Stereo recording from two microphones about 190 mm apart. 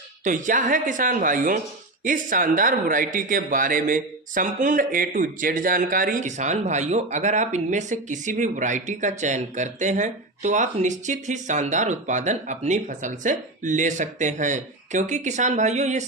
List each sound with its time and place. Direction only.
0.3 s a woman's voice: 45° right (ahead or behind)